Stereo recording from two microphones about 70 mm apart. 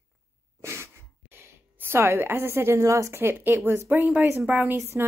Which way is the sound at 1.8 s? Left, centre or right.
Right.